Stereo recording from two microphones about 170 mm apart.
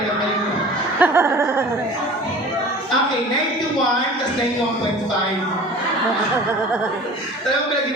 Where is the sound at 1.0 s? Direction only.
15° right (ahead or behind).